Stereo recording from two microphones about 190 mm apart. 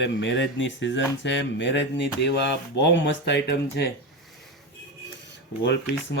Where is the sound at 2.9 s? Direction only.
70° left (ahead or behind).